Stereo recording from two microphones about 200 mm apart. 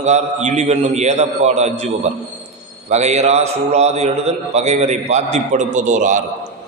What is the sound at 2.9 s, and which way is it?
A man's voice, 35° right (ahead or behind).